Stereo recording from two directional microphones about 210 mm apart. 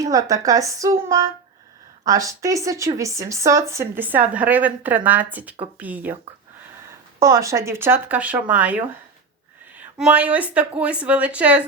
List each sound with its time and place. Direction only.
0.0 s a woman's voice: 15° right (ahead or behind)
7.2 s a woman's voice: 15° right (ahead or behind)